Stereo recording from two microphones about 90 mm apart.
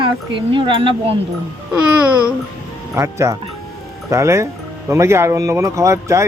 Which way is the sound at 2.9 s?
35° right (ahead or behind).